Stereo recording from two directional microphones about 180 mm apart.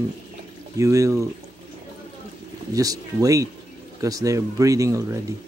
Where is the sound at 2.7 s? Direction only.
20° right (ahead or behind).